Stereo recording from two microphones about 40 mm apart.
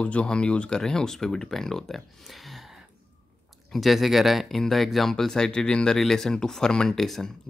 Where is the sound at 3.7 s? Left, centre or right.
Centre.